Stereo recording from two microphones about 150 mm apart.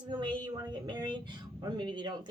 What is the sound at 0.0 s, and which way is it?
A woman's voice, 30° right (ahead or behind).